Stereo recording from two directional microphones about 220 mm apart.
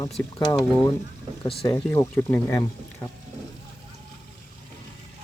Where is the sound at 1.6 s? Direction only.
15° left (ahead or behind).